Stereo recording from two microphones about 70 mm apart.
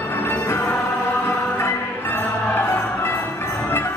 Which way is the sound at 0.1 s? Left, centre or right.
Left.